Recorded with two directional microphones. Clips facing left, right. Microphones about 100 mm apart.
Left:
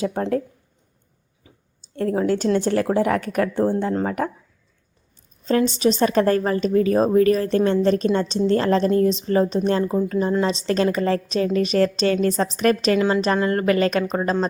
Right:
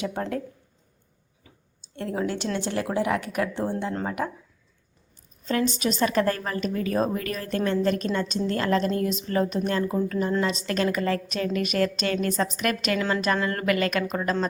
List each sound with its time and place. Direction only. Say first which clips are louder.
0.0 s speech: left 6 dB; 35° left (ahead or behind)
1.5 s a sound: left 3 dB; 25° left (ahead or behind)
2.0 s speech: left 7 dB; 40° left (ahead or behind)
5.5 s a woman's voice: left 6 dB; 30° left (ahead or behind)
13.0 s a woman's voice: left 5 dB; 20° left (ahead or behind)